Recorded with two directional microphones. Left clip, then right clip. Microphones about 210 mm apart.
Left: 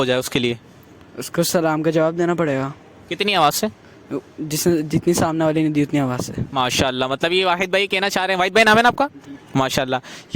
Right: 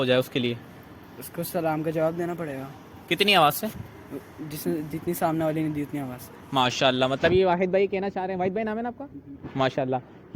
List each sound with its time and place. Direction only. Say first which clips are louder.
0.0 s speech: left 4 dB; 50° left (ahead or behind)